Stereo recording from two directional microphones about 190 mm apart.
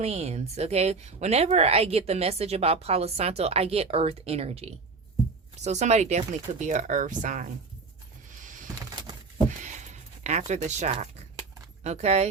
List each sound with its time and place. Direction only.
0.0 s speech: 35° right (ahead or behind)
8.3 s a sound: 45° right (ahead or behind)
11.8 s speech: 35° right (ahead or behind)